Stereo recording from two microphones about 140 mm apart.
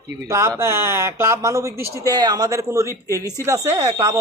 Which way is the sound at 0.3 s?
20° right (ahead or behind).